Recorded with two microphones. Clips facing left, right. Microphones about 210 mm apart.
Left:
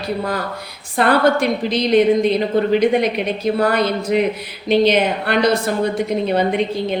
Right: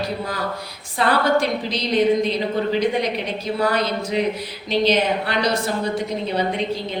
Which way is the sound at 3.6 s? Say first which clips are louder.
Left 1 dB; 55° left (ahead or behind).